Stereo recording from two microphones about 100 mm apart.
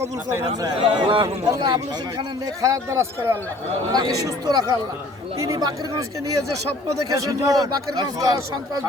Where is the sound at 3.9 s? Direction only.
40° right (ahead or behind).